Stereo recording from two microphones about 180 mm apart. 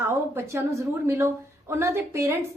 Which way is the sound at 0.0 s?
15° right (ahead or behind).